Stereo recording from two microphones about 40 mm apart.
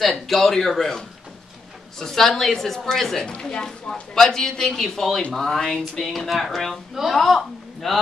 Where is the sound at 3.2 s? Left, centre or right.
Left.